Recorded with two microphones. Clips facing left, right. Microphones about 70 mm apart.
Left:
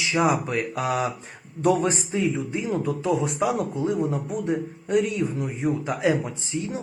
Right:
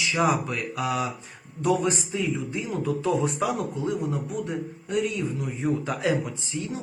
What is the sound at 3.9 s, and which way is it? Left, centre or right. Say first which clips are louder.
Speech: left 3 dB; left.